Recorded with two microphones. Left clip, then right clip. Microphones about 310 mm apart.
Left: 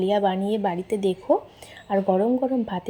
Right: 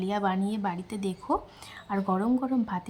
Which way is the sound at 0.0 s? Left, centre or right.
Centre.